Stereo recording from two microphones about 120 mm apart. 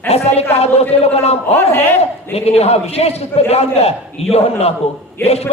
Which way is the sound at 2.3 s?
60° left (ahead or behind).